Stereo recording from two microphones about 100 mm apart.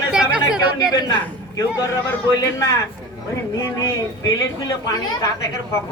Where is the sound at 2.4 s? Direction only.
35° left (ahead or behind).